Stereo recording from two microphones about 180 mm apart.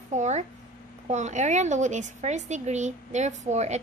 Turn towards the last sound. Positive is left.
turn(degrees=-40)  # may be behind; listen again after turning